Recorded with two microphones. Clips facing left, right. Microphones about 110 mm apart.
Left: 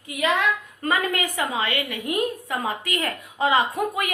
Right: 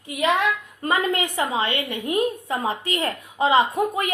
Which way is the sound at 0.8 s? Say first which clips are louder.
Right 2 dB; 20° right (ahead or behind).